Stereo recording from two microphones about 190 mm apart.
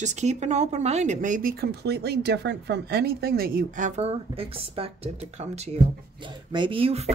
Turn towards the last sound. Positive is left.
turn(degrees=-30)  # may be behind; listen again after turning